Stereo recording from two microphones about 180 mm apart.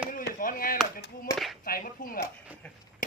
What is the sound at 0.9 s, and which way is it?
Speech, 50° left (ahead or behind).